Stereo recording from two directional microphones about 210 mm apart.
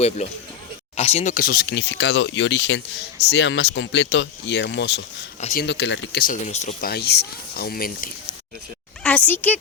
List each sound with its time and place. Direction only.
0.2 s a man's voice: 30° left (ahead or behind); by 5.0 s 55° left (ahead or behind)
5.4 s speech: 35° left (ahead or behind)
5.6 s speech: 55° left (ahead or behind); by 6.7 s 30° left (ahead or behind)
6.8 s speech: 50° left (ahead or behind)
9.0 s speech: 10° left (ahead or behind)